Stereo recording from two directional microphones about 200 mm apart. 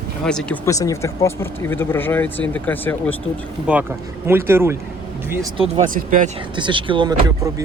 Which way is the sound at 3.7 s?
5° right (ahead or behind).